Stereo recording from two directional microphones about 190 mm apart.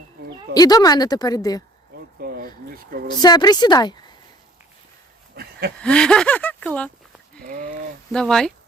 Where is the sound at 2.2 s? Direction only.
50° right (ahead or behind).